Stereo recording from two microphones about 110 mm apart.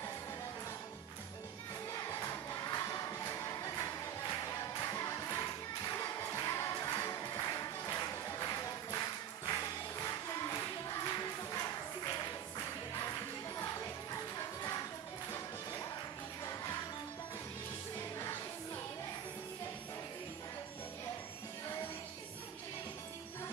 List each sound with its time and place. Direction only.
1.9 s music: 30° left (ahead or behind)
13.6 s music: 25° left (ahead or behind)